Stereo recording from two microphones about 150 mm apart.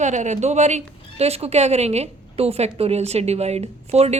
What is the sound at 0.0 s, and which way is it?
A woman's voice, 50° right (ahead or behind).